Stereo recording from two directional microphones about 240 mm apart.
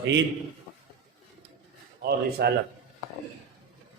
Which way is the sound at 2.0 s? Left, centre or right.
Right.